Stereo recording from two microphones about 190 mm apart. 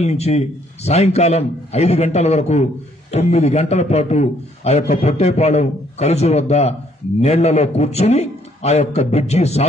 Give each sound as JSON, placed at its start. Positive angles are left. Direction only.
{"t": 0.0, "sound": "a man's voice", "side_deg": 35}